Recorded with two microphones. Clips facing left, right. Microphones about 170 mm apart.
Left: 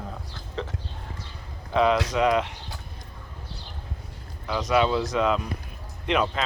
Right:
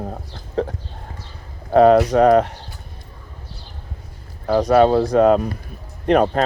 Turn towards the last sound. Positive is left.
turn(degrees=-50)  # may be behind; listen again after turning